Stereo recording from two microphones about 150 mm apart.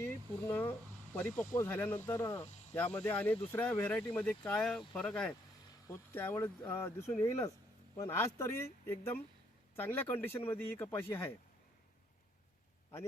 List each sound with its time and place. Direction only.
0.0 s speech: 15° left (ahead or behind)